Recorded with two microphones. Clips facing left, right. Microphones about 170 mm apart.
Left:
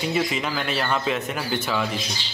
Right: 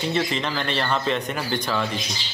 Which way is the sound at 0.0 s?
5° left (ahead or behind).